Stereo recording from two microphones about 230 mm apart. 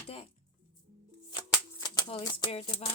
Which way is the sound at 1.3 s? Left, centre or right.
Centre.